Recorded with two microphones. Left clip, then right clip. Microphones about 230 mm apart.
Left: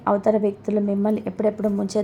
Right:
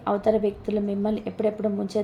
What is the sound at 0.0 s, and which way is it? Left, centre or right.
A woman's voice, left.